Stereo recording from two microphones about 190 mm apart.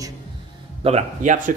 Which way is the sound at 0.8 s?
30° right (ahead or behind).